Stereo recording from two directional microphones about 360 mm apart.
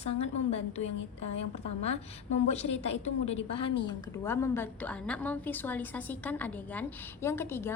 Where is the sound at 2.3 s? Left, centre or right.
Centre.